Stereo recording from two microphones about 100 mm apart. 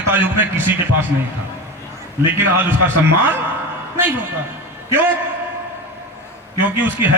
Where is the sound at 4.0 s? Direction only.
20° right (ahead or behind).